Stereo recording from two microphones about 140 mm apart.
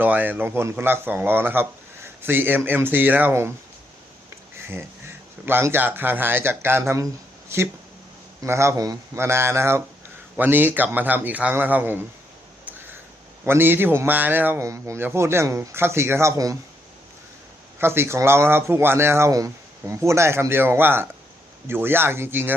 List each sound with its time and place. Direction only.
0.0 s a man's voice: 15° right (ahead or behind)
5.5 s a man's voice: 15° right (ahead or behind)
8.4 s a man's voice: 20° right (ahead or behind)
13.4 s a man's voice: 15° right (ahead or behind)
17.7 s a man's voice: 15° right (ahead or behind)